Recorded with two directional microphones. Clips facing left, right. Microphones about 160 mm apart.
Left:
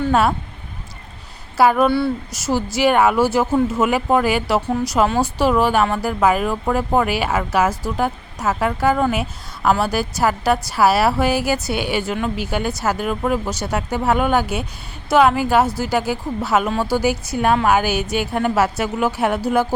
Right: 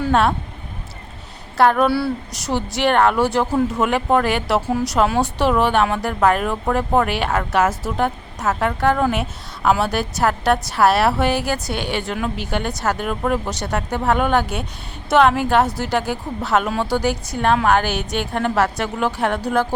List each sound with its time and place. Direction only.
0.0 s speech: centre (ahead or behind)
1.5 s speech: 5° left (ahead or behind)